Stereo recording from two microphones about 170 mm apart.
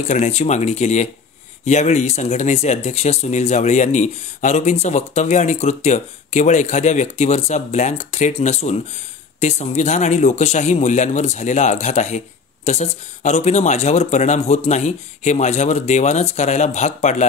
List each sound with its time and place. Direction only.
0.1 s a man's voice: 40° left (ahead or behind)